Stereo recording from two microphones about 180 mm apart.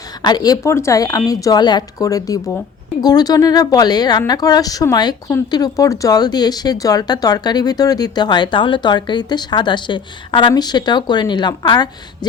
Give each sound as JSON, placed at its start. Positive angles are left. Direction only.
{"t": 0.2, "sound": "speech", "side_deg": 25}